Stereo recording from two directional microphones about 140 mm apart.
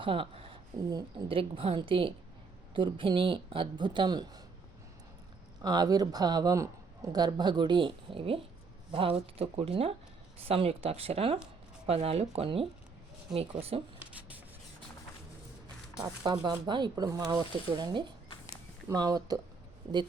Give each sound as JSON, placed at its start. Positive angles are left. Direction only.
{"t": 0.0, "sound": "a woman's voice", "side_deg": -40}
{"t": 5.6, "sound": "a woman's voice", "side_deg": -30}
{"t": 14.0, "sound": "rub", "side_deg": -10}
{"t": 16.0, "sound": "speech", "side_deg": -30}
{"t": 17.2, "sound": "a woman's voice", "side_deg": -35}